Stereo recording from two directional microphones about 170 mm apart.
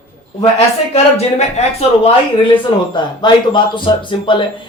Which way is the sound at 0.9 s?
40° left (ahead or behind).